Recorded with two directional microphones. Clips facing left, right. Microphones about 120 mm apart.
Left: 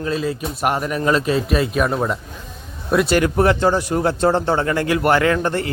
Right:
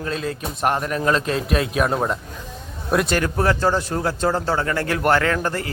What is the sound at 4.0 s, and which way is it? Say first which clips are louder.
A man's voice: left 4 dB; 25° left (ahead or behind).